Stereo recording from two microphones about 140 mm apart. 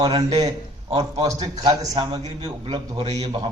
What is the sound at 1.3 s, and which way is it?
A man's voice, 25° right (ahead or behind).